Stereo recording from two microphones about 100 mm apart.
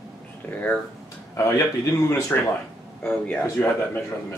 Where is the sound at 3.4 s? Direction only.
25° left (ahead or behind).